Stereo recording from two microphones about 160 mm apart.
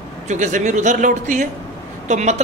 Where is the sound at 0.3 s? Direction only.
50° right (ahead or behind).